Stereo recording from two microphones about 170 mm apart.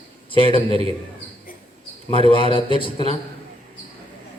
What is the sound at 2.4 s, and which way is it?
Speech, 30° left (ahead or behind).